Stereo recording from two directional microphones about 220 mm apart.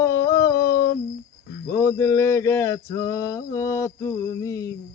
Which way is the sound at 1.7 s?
15° left (ahead or behind).